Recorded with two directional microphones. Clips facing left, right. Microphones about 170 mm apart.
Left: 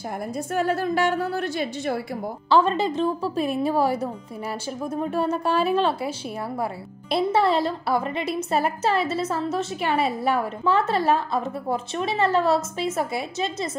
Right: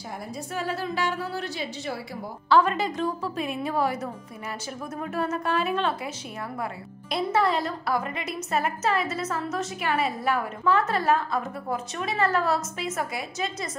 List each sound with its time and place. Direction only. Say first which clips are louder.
0.5 s a woman's voice: left 7 dB; 50° left (ahead or behind)
2.5 s speech: left 2 dB; 30° left (ahead or behind)